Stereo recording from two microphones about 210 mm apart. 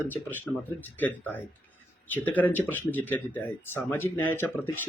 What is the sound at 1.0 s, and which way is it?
Speech, 10° left (ahead or behind).